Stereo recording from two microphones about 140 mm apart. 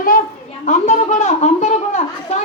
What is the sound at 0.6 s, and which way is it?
Speech, 60° left (ahead or behind).